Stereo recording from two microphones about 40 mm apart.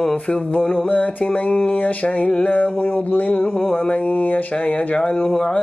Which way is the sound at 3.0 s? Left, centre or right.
Left.